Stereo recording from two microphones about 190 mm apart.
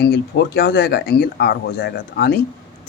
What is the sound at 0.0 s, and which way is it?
Speech, 60° left (ahead or behind).